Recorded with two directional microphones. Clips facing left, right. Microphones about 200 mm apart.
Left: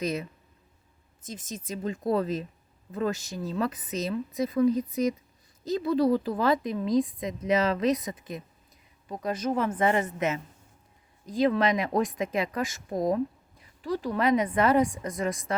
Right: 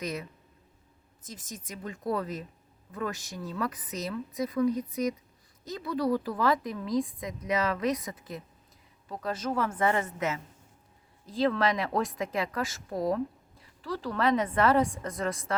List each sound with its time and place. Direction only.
0.0 s a woman's voice: 25° left (ahead or behind)